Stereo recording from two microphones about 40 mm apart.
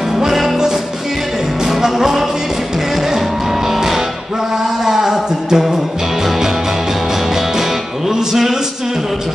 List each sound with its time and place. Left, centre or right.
0.1 s music: centre
1.6 s music: centre
8.1 s music: centre